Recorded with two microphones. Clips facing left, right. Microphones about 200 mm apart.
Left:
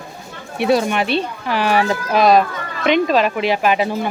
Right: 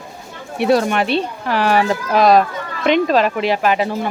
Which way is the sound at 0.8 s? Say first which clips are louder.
Right 1 dB; 5° left (ahead or behind).